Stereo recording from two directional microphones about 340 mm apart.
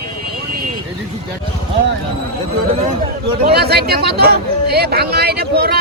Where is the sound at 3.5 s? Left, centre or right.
Right.